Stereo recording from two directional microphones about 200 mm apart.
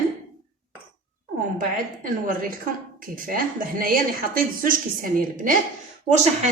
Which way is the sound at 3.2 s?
45° right (ahead or behind).